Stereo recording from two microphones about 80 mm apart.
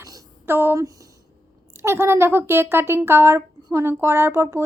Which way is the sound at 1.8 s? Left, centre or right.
Right.